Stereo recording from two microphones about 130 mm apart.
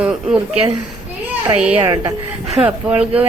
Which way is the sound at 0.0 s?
5° right (ahead or behind).